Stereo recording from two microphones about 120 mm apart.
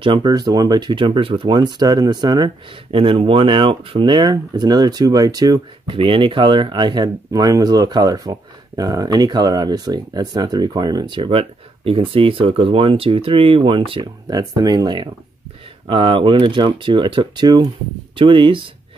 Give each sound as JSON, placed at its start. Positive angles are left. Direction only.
{"t": 0.0, "sound": "speech", "side_deg": -40}
{"t": 5.9, "sound": "speech", "side_deg": -45}
{"t": 14.2, "sound": "speech", "side_deg": -35}